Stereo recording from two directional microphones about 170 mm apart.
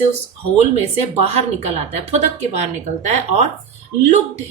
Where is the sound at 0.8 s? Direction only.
40° right (ahead or behind).